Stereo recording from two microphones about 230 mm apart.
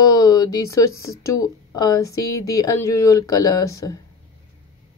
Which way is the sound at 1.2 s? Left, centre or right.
Centre.